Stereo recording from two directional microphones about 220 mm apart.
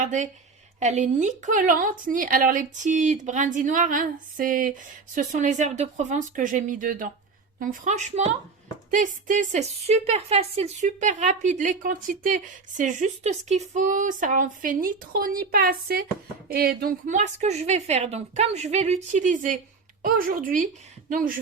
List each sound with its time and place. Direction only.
0.0 s a woman's voice: 35° right (ahead or behind)